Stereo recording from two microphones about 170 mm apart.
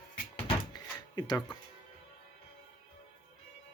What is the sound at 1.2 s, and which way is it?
Speech, 25° left (ahead or behind).